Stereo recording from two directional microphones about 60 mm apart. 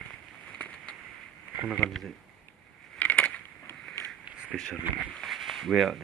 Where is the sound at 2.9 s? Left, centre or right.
Left.